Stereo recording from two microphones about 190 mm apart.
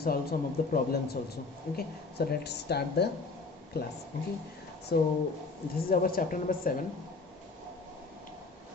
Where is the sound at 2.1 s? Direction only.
60° left (ahead or behind).